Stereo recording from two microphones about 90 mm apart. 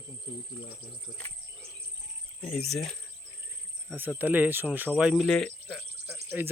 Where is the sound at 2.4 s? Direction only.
10° left (ahead or behind).